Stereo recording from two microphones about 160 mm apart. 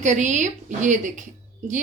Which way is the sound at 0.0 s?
50° right (ahead or behind).